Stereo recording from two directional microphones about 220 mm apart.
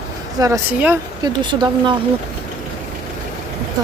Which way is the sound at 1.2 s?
20° right (ahead or behind).